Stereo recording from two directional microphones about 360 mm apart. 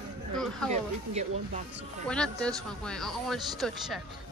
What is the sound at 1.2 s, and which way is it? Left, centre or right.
Speech, centre.